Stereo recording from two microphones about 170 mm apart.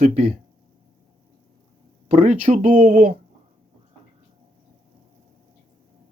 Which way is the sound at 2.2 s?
45° right (ahead or behind).